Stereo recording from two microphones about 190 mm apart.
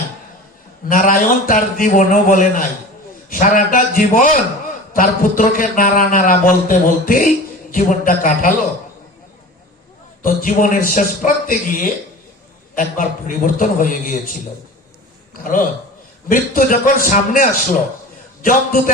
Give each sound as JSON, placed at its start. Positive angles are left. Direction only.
{"t": 0.9, "sound": "a man's voice", "side_deg": 45}
{"t": 10.2, "sound": "a man's voice", "side_deg": 45}